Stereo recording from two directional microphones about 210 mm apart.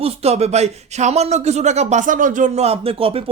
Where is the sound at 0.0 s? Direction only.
30° right (ahead or behind).